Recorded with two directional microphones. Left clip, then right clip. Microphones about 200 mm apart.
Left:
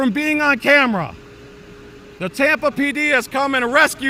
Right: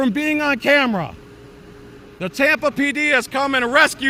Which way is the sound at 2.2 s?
Centre (ahead or behind).